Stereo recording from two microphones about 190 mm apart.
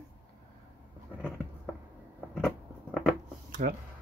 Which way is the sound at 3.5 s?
45° right (ahead or behind).